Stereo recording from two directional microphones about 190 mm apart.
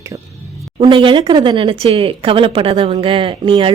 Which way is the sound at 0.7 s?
25° right (ahead or behind).